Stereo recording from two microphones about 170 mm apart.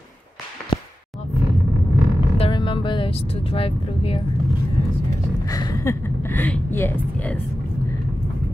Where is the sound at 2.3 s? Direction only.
30° left (ahead or behind).